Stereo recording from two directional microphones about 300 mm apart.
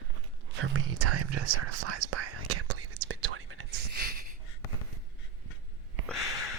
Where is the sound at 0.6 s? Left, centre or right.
Right.